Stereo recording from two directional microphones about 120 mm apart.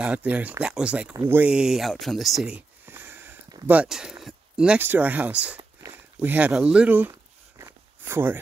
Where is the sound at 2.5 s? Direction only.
15° right (ahead or behind).